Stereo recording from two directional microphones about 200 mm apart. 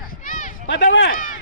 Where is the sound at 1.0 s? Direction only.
45° left (ahead or behind).